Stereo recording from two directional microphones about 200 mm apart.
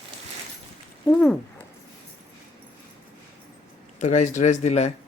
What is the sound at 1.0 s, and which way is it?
Speech, 5° left (ahead or behind).